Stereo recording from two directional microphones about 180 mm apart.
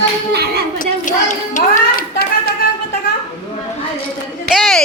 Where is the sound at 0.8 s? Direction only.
45° left (ahead or behind).